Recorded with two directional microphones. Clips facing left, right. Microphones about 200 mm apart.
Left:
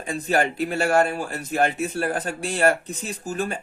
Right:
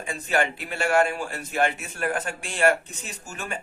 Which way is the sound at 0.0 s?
40° left (ahead or behind).